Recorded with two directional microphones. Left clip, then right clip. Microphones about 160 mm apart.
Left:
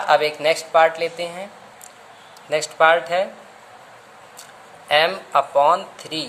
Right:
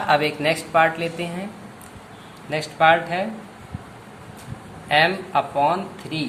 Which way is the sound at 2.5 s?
50° left (ahead or behind).